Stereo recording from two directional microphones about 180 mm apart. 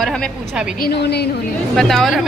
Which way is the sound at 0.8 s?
65° left (ahead or behind).